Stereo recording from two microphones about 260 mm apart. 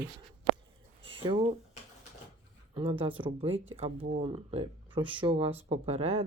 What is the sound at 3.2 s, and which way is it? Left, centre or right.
Speech, centre.